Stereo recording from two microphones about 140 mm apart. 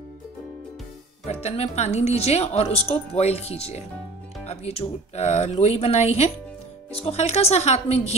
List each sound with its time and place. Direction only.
1.2 s speech: 50° left (ahead or behind)